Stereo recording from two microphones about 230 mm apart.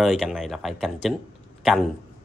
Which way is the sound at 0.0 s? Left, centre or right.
Centre.